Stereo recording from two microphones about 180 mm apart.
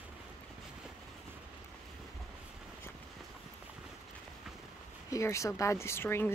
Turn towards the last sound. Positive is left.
turn(degrees=15)  # may be behind; listen again after turning